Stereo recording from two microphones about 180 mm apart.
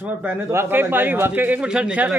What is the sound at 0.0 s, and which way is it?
A man's voice, 10° right (ahead or behind).